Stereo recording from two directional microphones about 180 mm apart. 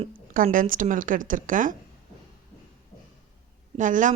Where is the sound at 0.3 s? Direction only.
50° right (ahead or behind).